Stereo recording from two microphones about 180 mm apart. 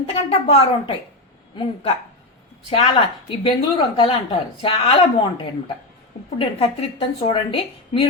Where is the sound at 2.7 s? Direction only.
30° left (ahead or behind).